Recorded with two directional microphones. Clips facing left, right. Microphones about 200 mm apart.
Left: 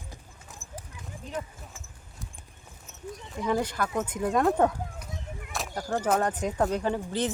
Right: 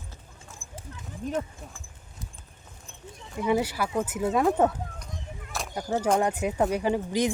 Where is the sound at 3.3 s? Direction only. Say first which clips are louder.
Right 2 dB; 5° right (ahead or behind).